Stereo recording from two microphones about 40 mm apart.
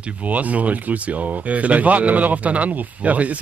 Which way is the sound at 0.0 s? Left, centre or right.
Right.